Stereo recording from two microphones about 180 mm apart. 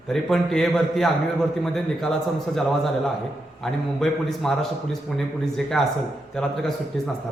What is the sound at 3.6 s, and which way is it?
A man's voice, centre (ahead or behind).